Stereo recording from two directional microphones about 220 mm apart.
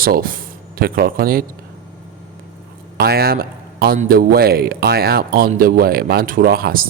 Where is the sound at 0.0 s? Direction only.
40° right (ahead or behind).